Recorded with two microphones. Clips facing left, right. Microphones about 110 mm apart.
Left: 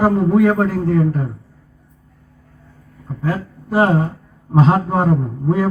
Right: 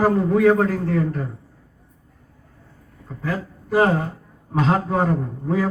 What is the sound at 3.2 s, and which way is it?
Speech, 30° left (ahead or behind).